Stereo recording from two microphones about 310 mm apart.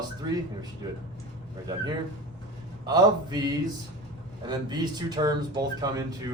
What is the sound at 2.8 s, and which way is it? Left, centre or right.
Speech, centre.